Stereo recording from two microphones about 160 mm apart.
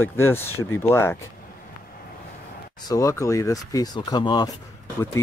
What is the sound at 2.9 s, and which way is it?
Speech, 20° left (ahead or behind).